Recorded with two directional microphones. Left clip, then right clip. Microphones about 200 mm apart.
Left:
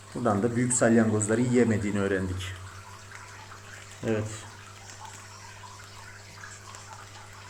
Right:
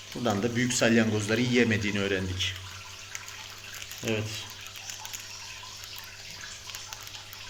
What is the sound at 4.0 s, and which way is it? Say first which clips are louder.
Speech: left 1 dB; 20° left (ahead or behind).